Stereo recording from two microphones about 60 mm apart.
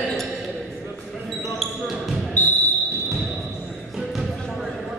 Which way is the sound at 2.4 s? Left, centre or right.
Left.